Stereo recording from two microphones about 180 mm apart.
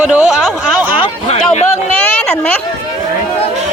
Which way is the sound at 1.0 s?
35° left (ahead or behind).